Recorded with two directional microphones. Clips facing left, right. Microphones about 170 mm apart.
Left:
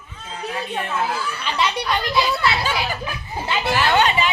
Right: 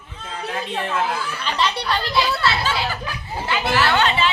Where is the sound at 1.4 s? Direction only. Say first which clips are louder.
Even; 10° left (ahead or behind).